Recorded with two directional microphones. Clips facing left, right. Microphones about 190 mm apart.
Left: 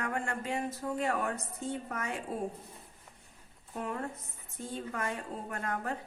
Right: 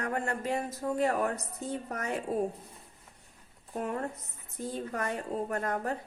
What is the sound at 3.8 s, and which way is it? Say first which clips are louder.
A woman's voice: right 3 dB; 40° right (ahead or behind).